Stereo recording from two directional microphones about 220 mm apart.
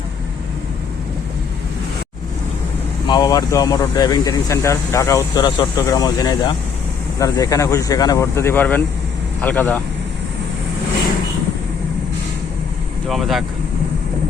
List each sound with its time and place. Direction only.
3.1 s speech: 20° left (ahead or behind)
13.1 s speech: centre (ahead or behind)